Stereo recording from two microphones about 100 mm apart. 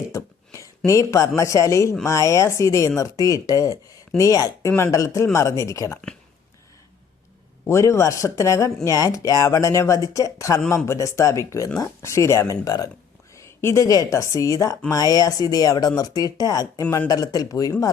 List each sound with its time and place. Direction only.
0.1 s a sound: 35° left (ahead or behind)
0.9 s speech: 30° left (ahead or behind)
7.7 s speech: 30° left (ahead or behind)